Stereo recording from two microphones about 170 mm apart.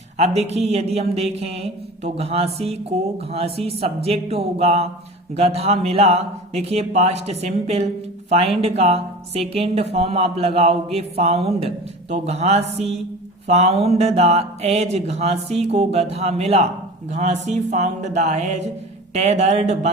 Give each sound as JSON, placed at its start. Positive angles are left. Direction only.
{"t": 0.2, "sound": "speech", "side_deg": -40}